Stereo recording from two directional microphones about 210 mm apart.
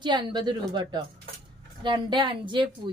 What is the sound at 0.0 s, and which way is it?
A woman's voice, 20° right (ahead or behind).